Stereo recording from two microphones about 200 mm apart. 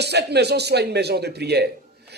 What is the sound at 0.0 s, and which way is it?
A man's voice, 55° right (ahead or behind).